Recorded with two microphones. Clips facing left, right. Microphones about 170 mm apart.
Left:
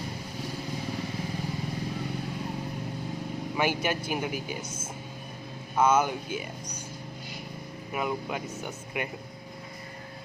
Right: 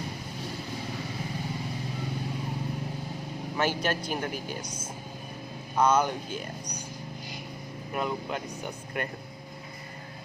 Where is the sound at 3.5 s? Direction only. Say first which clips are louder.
Even; 10° left (ahead or behind).